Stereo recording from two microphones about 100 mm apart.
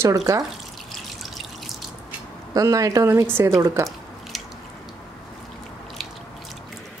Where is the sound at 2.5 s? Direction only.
35° right (ahead or behind).